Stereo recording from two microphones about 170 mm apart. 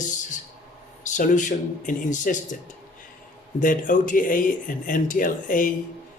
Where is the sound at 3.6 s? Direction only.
50° left (ahead or behind).